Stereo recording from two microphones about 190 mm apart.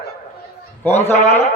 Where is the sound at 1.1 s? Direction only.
35° left (ahead or behind).